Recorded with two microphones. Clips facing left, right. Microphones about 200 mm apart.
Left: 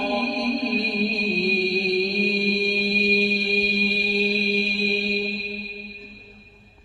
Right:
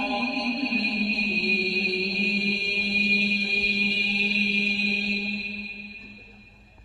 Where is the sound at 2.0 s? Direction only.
65° left (ahead or behind).